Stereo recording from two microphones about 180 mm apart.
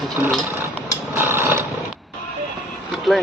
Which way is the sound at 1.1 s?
10° right (ahead or behind).